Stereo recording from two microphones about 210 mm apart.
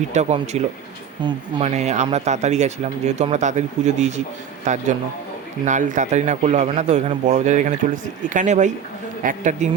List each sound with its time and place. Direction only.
0.1 s speech: 35° right (ahead or behind)